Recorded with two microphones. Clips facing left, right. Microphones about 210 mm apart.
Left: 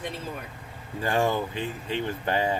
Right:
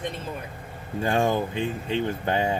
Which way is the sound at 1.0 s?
20° right (ahead or behind).